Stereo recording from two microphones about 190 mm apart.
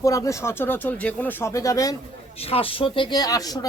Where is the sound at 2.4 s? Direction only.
30° left (ahead or behind).